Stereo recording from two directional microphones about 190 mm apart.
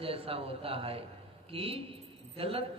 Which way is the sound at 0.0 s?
30° right (ahead or behind).